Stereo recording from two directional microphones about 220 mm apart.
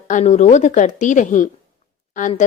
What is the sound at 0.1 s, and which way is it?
Speech, 35° left (ahead or behind).